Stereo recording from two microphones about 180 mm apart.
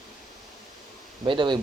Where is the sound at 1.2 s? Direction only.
25° right (ahead or behind).